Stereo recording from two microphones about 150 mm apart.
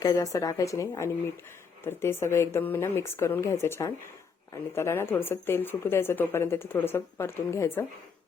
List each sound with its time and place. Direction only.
0.0 s a woman's voice: 25° left (ahead or behind)